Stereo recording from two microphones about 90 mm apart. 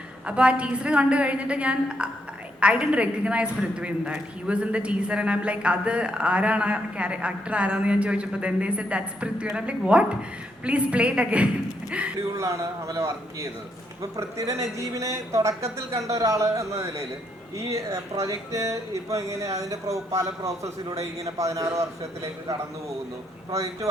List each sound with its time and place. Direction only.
0.3 s a woman's voice: 10° right (ahead or behind)
12.3 s speech: 35° right (ahead or behind)
23.5 s speech: 35° right (ahead or behind)